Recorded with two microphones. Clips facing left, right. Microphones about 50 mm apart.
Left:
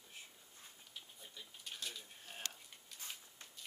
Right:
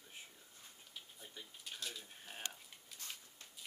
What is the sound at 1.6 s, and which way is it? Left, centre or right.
Speech, centre.